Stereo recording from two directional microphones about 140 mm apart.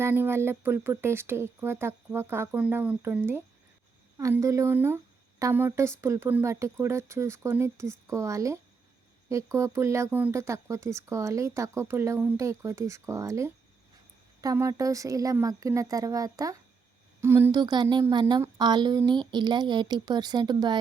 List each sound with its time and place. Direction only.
0.0 s a woman's voice: 15° right (ahead or behind)
17.5 s speech: 30° right (ahead or behind)